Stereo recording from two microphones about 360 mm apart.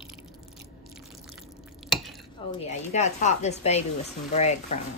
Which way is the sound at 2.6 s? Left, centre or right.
Centre.